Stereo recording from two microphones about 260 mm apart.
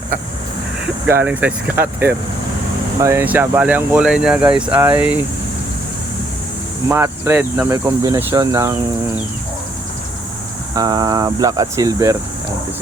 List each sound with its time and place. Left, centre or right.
1.0 s speech: centre
6.8 s speech: centre
10.8 s speech: centre